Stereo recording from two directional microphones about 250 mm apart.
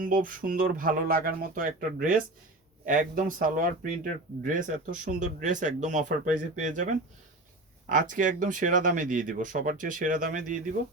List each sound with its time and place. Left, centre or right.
0.0 s speech: right
7.9 s speech: right